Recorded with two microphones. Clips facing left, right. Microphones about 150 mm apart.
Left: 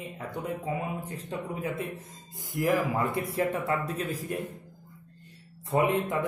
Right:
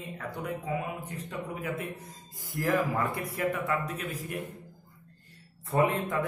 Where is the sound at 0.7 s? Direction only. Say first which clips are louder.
Left 1 dB; 30° left (ahead or behind).